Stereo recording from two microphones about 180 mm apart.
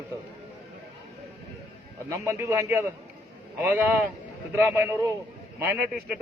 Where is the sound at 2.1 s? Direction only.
15° right (ahead or behind).